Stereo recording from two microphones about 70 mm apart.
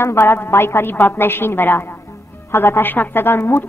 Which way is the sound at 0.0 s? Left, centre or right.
Left.